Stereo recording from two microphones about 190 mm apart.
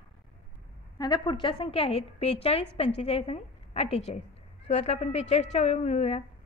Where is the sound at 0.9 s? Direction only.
20° left (ahead or behind).